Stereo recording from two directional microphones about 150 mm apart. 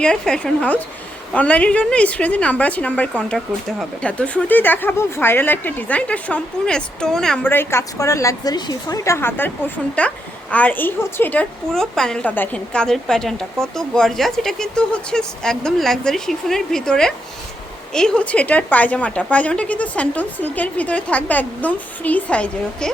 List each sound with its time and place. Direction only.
0.0 s a woman's voice: 5° left (ahead or behind)
7.4 s a woman's voice: 15° left (ahead or behind)